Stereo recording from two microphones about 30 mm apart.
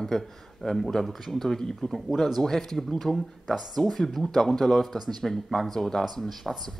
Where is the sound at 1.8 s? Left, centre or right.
Left.